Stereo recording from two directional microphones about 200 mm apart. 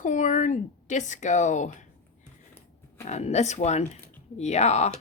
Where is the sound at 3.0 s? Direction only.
35° left (ahead or behind).